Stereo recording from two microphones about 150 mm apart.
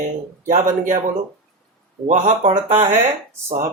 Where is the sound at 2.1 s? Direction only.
55° right (ahead or behind).